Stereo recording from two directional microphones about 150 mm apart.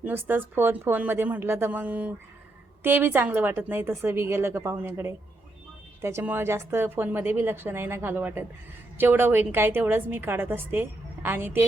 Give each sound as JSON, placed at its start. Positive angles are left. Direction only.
{"t": 0.0, "sound": "a woman's voice", "side_deg": -15}